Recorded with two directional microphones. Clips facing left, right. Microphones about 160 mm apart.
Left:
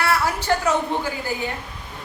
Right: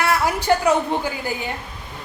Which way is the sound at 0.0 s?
15° right (ahead or behind).